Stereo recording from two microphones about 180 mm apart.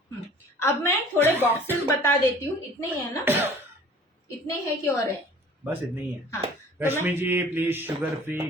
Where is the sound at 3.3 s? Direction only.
10° right (ahead or behind).